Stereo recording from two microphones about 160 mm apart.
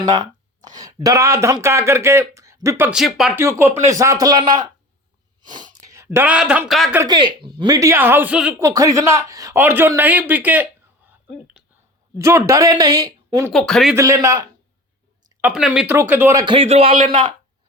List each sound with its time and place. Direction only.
0.0 s a sound: 25° right (ahead or behind)
1.0 s speech: 20° right (ahead or behind)
2.9 s speech: centre (ahead or behind)
3.3 s speech: 15° right (ahead or behind)
5.8 s speech: 20° right (ahead or behind); by 6.9 s centre (ahead or behind)
7.1 s speech: 30° right (ahead or behind); by 8.5 s 10° right (ahead or behind)
8.6 s a man's voice: 20° right (ahead or behind)
13.5 s speech: 5° left (ahead or behind)
13.9 s speech: 20° right (ahead or behind)
15.4 s speech: 10° right (ahead or behind)
16.0 s speech: 15° right (ahead or behind)
16.6 s a man's voice: 35° right (ahead or behind)